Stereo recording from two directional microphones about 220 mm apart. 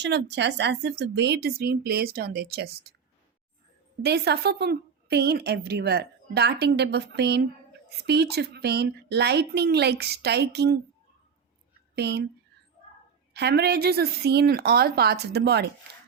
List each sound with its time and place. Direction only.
0.0 s a woman's voice: 50° right (ahead or behind)
4.0 s a woman's voice: 45° right (ahead or behind)
11.9 s a woman's voice: 50° right (ahead or behind)
13.3 s a woman's voice: 50° right (ahead or behind)